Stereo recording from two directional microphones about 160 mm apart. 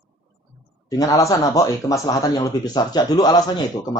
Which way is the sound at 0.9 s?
20° left (ahead or behind).